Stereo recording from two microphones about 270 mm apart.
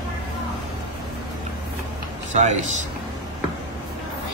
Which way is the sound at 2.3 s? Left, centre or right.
Right.